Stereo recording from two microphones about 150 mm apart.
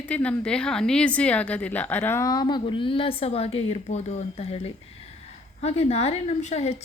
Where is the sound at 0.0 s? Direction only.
10° left (ahead or behind).